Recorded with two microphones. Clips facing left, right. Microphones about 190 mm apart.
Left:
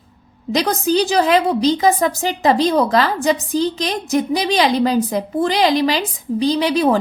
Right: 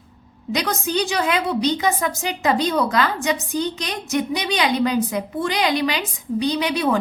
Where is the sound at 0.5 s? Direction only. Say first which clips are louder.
Left 6 dB; 35° left (ahead or behind).